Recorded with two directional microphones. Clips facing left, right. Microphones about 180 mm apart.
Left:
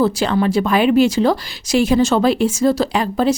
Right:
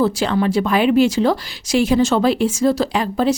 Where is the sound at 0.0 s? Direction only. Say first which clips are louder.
Left 1 dB; 40° left (ahead or behind).